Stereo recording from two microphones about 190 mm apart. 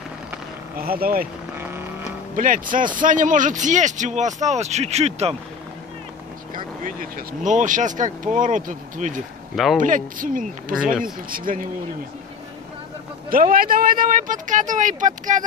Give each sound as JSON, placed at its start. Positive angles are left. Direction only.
{"t": 0.7, "sound": "speech", "side_deg": -50}
{"t": 2.3, "sound": "speech", "side_deg": -45}
{"t": 6.5, "sound": "speech", "side_deg": -45}
{"t": 10.8, "sound": "speech", "side_deg": -5}
{"t": 11.2, "sound": "speech", "side_deg": -50}
{"t": 13.3, "sound": "speech", "side_deg": -50}